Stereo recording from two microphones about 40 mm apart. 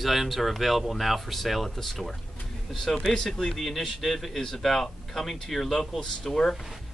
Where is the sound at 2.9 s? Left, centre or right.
Left.